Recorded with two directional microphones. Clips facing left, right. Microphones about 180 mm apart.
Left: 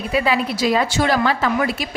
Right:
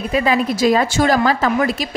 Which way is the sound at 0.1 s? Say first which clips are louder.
Right 2 dB; 45° right (ahead or behind).